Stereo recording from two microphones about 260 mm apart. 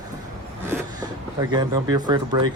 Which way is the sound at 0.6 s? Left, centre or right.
Centre.